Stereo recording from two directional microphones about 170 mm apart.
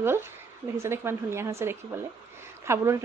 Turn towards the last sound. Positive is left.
turn(degrees=-15)  # may be behind; listen again after turning